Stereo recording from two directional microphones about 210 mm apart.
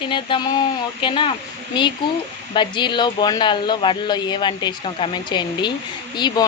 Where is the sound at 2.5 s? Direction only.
20° left (ahead or behind).